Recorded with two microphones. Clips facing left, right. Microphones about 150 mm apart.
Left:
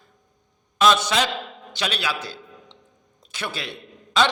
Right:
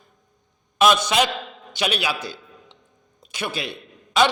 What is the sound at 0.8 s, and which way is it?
A man's voice, 15° right (ahead or behind).